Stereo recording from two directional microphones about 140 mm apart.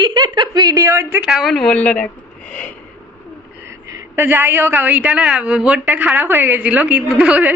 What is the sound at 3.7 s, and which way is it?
A woman's voice, 20° right (ahead or behind).